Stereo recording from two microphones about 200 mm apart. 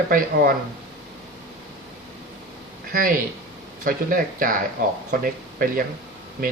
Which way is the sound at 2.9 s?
45° right (ahead or behind).